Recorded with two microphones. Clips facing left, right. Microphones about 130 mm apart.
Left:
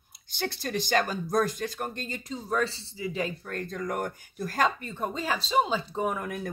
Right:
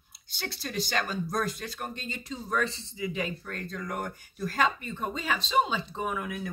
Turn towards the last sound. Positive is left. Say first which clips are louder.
# left 3 dB
turn(degrees=45)  # may be behind; listen again after turning